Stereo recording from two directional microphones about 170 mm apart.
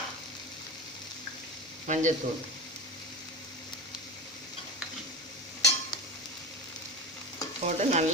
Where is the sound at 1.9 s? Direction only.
45° right (ahead or behind).